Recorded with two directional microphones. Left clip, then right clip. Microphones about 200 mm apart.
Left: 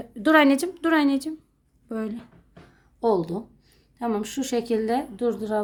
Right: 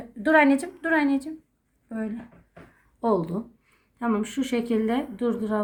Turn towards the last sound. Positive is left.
turn(degrees=25)  # may be behind; listen again after turning